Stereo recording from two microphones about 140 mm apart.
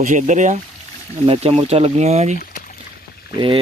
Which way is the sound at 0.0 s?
65° right (ahead or behind).